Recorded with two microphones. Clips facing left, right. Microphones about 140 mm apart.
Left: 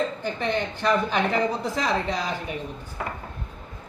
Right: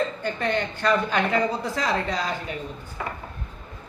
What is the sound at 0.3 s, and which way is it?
A woman's voice, 5° left (ahead or behind).